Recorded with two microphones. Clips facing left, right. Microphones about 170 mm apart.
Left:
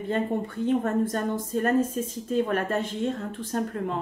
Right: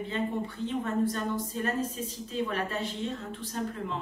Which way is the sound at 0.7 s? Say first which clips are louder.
Left 5 dB; 50° left (ahead or behind).